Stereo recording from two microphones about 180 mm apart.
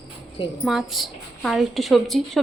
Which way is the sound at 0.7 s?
Centre (ahead or behind).